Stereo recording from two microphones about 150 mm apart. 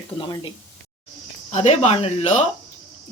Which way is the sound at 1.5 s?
45° left (ahead or behind).